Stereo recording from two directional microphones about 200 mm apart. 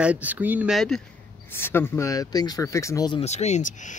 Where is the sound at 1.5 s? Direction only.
10° left (ahead or behind).